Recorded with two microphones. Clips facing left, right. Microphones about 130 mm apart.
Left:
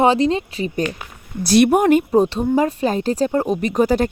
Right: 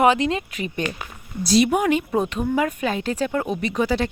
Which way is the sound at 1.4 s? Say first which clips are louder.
Left 5 dB; 60° left (ahead or behind).